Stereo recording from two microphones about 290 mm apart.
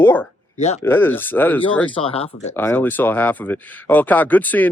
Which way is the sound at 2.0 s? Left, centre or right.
Centre.